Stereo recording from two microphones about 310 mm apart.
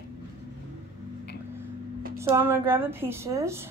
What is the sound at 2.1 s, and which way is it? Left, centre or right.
A woman's voice, centre.